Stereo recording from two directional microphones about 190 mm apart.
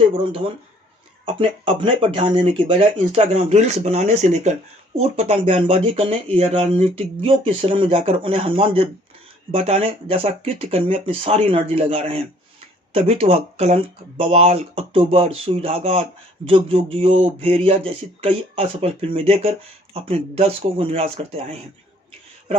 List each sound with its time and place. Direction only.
1.2 s speech: 30° right (ahead or behind)